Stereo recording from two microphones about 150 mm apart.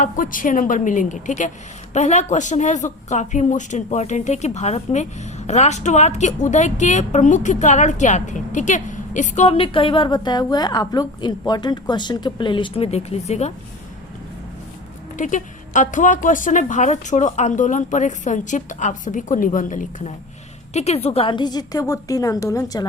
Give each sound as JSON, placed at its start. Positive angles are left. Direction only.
{"t": 0.0, "sound": "a woman's voice", "side_deg": 65}
{"t": 15.2, "sound": "speech", "side_deg": 60}
{"t": 20.7, "sound": "a woman's voice", "side_deg": 45}